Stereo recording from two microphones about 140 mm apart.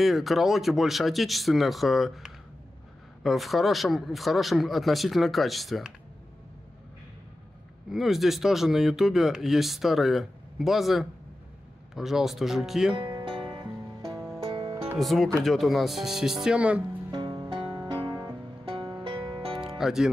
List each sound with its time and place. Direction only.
0.0 s speech: centre (ahead or behind)
7.9 s speech: centre (ahead or behind)
12.9 s music: 35° right (ahead or behind)
15.0 s speech: centre (ahead or behind)
17.1 s music: 30° right (ahead or behind)
18.0 s music: 20° right (ahead or behind)
18.7 s music: 35° right (ahead or behind)
19.8 s speech: 5° right (ahead or behind)